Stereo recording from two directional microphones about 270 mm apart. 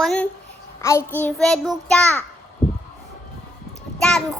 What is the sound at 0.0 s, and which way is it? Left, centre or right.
A woman's voice, centre.